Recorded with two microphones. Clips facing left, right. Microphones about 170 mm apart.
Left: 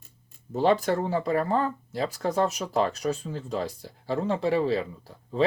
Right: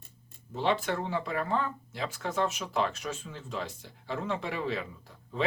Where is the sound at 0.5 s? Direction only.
40° left (ahead or behind).